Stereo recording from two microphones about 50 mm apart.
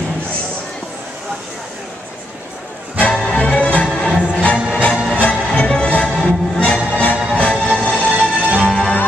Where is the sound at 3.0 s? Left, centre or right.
Left.